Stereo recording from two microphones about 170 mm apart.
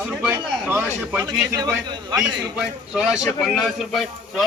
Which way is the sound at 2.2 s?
5° right (ahead or behind).